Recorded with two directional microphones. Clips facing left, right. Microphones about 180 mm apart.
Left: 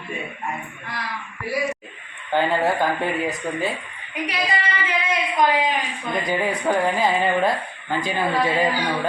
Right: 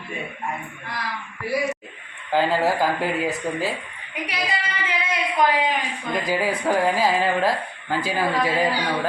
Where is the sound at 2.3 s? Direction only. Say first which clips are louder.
Even; 5° right (ahead or behind).